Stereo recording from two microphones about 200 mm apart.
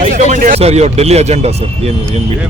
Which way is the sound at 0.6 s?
30° right (ahead or behind).